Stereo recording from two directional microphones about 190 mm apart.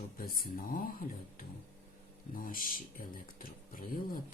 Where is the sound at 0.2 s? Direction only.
50° left (ahead or behind).